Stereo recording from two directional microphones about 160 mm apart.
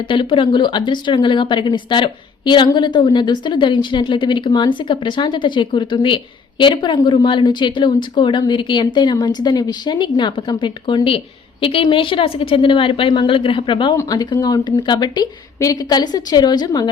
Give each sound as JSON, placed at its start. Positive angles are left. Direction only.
{"t": 0.1, "sound": "a woman's voice", "side_deg": 30}